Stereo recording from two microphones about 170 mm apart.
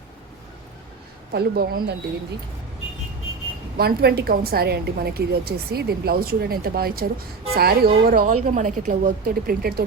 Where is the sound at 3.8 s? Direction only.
70° right (ahead or behind).